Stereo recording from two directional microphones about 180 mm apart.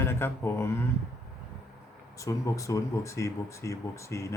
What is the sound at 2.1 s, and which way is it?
Speech, 20° left (ahead or behind).